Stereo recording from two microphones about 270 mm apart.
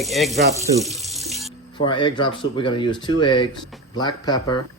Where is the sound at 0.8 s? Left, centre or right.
Centre.